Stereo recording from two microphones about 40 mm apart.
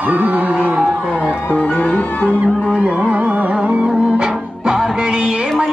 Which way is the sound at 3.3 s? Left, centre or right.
Right.